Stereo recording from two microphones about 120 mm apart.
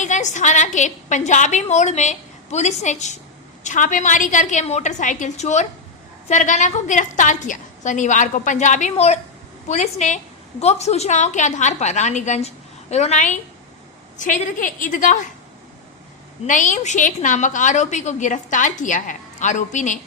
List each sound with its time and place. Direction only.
0.0 s a woman's voice: 90° left; by 9.2 s 70° left (ahead or behind)
9.6 s a woman's voice: 85° left
10.6 s a woman's voice: 65° left (ahead or behind)
14.2 s a woman's voice: 90° left
16.5 s a woman's voice: 90° left